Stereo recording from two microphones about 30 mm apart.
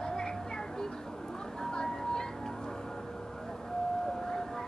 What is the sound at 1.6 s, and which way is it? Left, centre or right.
Music, left.